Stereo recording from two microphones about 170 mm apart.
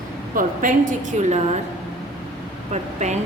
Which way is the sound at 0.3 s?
50° right (ahead or behind).